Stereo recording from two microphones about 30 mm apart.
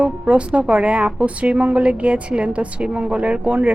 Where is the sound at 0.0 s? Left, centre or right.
Right.